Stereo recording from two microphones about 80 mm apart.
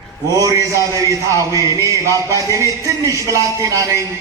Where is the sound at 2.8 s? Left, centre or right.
Right.